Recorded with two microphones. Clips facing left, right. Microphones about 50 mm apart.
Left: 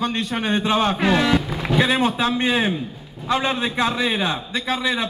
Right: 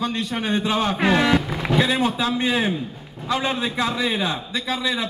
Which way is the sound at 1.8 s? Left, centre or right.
Left.